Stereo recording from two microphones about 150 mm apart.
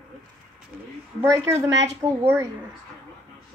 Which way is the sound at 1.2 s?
20° right (ahead or behind).